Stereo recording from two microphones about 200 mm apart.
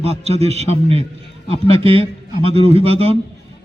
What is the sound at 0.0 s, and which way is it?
Speech, 30° right (ahead or behind).